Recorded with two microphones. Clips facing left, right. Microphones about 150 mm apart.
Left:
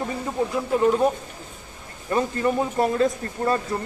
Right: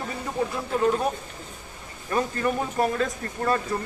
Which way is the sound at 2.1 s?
25° left (ahead or behind).